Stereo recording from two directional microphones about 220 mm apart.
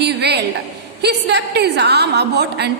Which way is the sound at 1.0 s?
50° right (ahead or behind).